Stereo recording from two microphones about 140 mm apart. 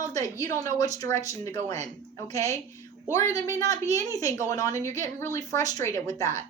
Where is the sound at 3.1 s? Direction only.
20° left (ahead or behind).